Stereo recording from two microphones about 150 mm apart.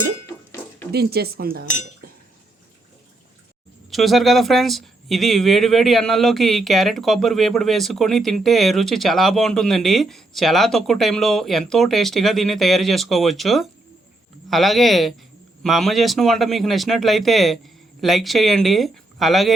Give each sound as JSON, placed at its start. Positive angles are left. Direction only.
{"t": 0.9, "sound": "speech", "side_deg": -90}
{"t": 3.9, "sound": "speech", "side_deg": 0}